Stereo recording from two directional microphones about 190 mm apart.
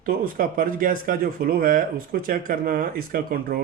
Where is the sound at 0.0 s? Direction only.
50° right (ahead or behind).